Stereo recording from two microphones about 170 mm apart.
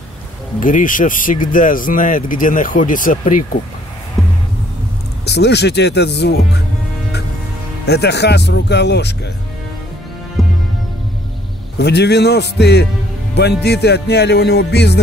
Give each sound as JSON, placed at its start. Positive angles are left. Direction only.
{"t": 0.6, "sound": "speech", "side_deg": 50}
{"t": 4.2, "sound": "music", "side_deg": 0}
{"t": 5.2, "sound": "speech", "side_deg": 80}
{"t": 7.8, "sound": "speech", "side_deg": 75}
{"t": 10.4, "sound": "music", "side_deg": 0}
{"t": 11.8, "sound": "speech", "side_deg": 80}
{"t": 13.3, "sound": "music", "side_deg": 75}